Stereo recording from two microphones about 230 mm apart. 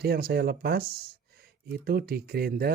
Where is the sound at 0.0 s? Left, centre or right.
Right.